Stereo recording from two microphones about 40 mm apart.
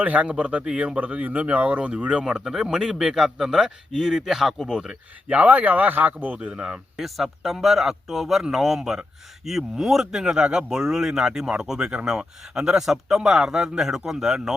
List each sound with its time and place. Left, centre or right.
0.0 s speech: right
2.4 s speech: centre
5.3 s speech: right
6.4 s speech: right
6.9 s speech: centre